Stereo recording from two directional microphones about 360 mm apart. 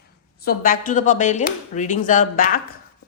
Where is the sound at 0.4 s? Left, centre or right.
Left.